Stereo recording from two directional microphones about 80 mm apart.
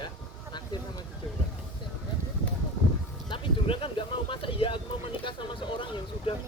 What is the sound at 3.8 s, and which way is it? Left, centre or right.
Speech, left.